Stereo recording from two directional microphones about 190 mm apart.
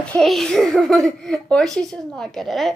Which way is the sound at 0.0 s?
5° left (ahead or behind).